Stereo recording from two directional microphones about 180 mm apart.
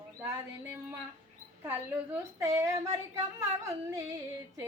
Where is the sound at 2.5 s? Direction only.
15° right (ahead or behind).